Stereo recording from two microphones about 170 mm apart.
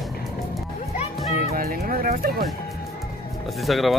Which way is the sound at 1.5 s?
60° right (ahead or behind).